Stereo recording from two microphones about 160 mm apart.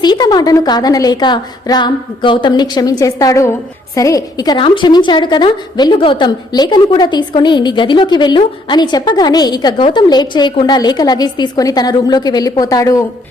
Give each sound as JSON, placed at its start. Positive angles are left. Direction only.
{"t": 0.0, "sound": "a woman's voice", "side_deg": 25}